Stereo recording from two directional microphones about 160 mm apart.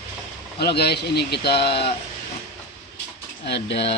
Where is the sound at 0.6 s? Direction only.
80° left.